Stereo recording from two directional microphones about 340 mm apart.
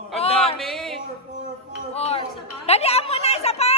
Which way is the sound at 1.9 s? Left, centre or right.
Centre.